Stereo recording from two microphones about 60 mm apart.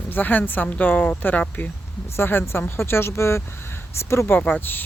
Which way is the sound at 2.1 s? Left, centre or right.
Left.